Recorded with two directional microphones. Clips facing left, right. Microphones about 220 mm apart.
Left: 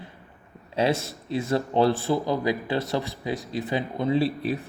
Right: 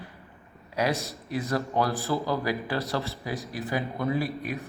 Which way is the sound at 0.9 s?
Centre (ahead or behind).